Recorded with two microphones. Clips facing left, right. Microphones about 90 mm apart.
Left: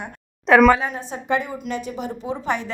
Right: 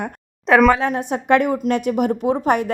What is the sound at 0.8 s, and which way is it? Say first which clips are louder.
A woman's voice: right 7 dB; 65° right (ahead or behind).